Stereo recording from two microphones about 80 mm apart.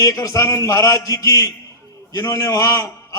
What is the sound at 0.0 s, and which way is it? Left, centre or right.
A man's voice, left.